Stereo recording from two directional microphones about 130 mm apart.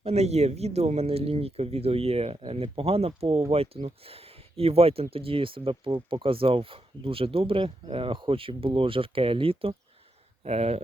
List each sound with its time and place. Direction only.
0.0 s speech: 55° right (ahead or behind)